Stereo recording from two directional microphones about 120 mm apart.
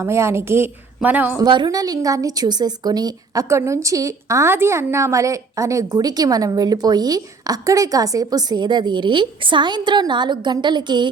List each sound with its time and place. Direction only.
0.0 s a woman's voice: 20° right (ahead or behind)
1.4 s a woman's voice: 40° right (ahead or behind)